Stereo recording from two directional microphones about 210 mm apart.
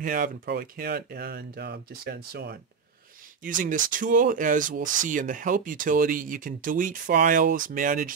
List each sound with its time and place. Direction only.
0.0 s speech: 40° right (ahead or behind)